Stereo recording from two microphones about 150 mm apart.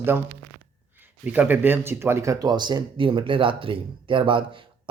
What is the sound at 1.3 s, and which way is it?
Speech, 10° right (ahead or behind).